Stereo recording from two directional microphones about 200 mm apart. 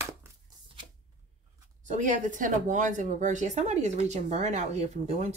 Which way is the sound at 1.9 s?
40° right (ahead or behind).